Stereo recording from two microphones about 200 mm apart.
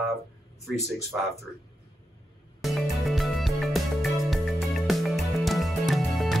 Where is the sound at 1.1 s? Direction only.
10° right (ahead or behind).